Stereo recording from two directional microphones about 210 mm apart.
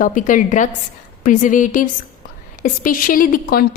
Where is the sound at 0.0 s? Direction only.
40° left (ahead or behind).